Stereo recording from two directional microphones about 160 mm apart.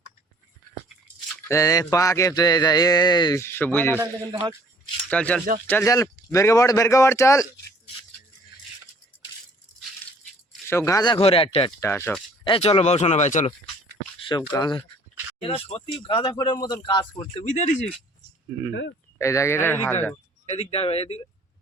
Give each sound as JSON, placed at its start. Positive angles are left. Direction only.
{"t": 1.5, "sound": "speech", "side_deg": 20}
{"t": 3.9, "sound": "a man's voice", "side_deg": -20}
{"t": 5.0, "sound": "speech", "side_deg": 10}
{"t": 10.7, "sound": "speech", "side_deg": 20}
{"t": 11.8, "sound": "speech", "side_deg": 15}
{"t": 12.5, "sound": "speech", "side_deg": 35}
{"t": 14.2, "sound": "a sound", "side_deg": 30}
{"t": 14.5, "sound": "speech", "side_deg": 25}
{"t": 15.4, "sound": "speech", "side_deg": 35}
{"t": 17.4, "sound": "speech", "side_deg": 50}
{"t": 19.2, "sound": "speech", "side_deg": 20}
{"t": 20.5, "sound": "speech", "side_deg": 40}